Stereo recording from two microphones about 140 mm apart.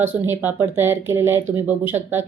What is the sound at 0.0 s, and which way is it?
Speech, 15° right (ahead or behind).